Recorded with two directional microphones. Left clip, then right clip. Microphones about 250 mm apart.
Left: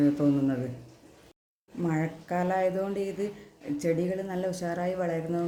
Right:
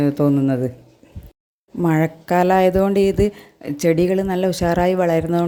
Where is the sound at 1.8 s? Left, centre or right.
Right.